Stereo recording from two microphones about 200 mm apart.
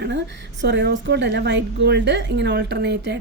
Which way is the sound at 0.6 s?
60° right (ahead or behind).